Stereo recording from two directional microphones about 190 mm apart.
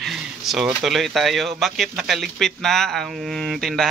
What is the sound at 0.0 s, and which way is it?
A man's voice, centre (ahead or behind).